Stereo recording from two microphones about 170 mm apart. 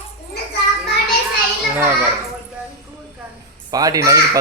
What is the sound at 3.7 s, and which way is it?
Speech, 20° right (ahead or behind).